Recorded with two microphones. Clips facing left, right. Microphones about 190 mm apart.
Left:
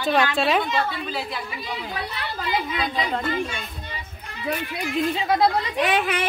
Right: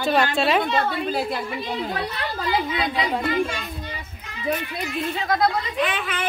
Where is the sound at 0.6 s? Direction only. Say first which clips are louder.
Right 2 dB; 50° right (ahead or behind).